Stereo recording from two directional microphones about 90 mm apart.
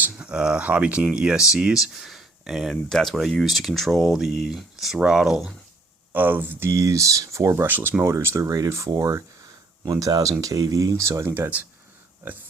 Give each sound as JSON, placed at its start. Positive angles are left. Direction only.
{"t": 0.1, "sound": "speech", "side_deg": -10}
{"t": 6.1, "sound": "speech", "side_deg": -20}